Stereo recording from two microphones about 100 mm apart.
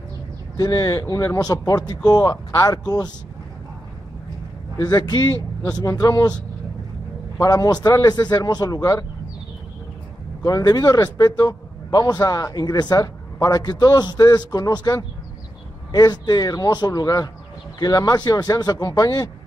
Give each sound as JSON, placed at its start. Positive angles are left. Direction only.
{"t": 0.6, "sound": "a man's voice", "side_deg": 40}
{"t": 4.7, "sound": "a man's voice", "side_deg": 40}
{"t": 10.4, "sound": "a man's voice", "side_deg": 40}